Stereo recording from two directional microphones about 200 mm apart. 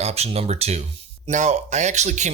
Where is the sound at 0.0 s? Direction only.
30° right (ahead or behind).